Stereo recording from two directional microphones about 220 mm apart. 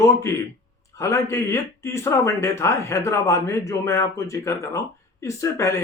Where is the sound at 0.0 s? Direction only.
15° left (ahead or behind).